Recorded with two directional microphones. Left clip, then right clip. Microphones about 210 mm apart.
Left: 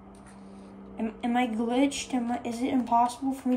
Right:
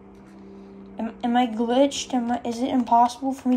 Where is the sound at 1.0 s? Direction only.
15° right (ahead or behind).